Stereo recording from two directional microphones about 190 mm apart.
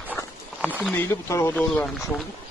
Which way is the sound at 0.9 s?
10° left (ahead or behind).